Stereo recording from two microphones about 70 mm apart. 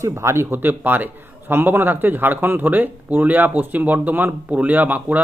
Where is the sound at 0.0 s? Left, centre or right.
Right.